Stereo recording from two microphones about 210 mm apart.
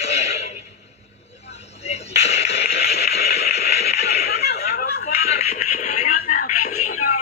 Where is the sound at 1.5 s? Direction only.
30° left (ahead or behind).